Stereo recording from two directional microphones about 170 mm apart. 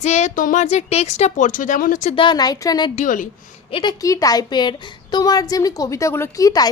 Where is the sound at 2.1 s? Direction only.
25° left (ahead or behind).